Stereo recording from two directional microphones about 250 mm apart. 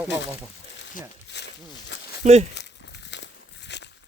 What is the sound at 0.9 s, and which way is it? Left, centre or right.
Speech, left.